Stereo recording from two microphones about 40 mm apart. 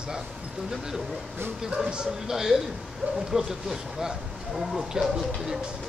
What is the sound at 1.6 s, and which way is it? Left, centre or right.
Speech, right.